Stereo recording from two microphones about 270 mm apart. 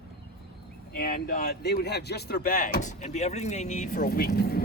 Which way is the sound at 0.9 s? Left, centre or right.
Left.